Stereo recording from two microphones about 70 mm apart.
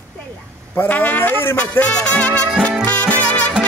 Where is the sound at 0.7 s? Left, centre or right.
Left.